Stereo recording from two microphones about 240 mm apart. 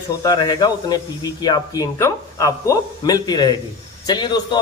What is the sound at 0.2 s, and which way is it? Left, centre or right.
A man's voice, centre.